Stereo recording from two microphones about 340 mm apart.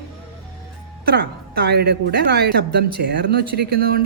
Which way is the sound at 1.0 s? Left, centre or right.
Right.